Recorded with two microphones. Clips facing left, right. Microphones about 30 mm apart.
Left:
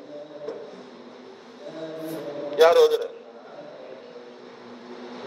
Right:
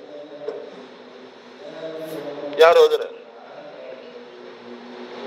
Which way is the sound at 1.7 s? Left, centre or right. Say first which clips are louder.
Right 2 dB; right.